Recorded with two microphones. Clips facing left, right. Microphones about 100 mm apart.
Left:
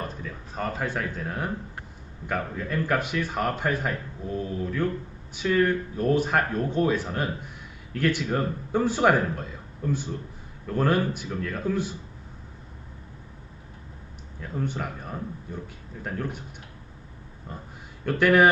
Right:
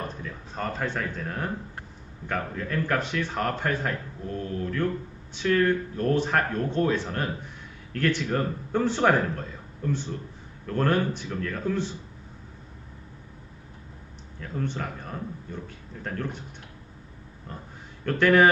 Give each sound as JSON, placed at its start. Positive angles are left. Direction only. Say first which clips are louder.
{"t": 0.0, "sound": "speech", "louder": "even", "side_deg": 0}
{"t": 14.4, "sound": "speech", "louder": "left 1 dB", "side_deg": 10}
{"t": 18.0, "sound": "speech", "louder": "even", "side_deg": 5}